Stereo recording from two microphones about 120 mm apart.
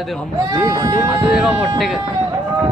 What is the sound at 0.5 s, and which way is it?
Speech, 30° right (ahead or behind).